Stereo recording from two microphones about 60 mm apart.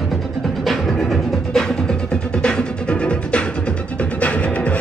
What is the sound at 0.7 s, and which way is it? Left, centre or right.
Music, centre.